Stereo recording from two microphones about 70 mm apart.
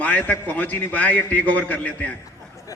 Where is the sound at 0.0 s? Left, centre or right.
Left.